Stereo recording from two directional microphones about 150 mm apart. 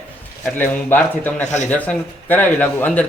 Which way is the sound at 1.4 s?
50° left (ahead or behind).